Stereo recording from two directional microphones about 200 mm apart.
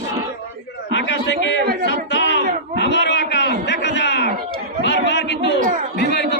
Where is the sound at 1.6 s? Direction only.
50° right (ahead or behind).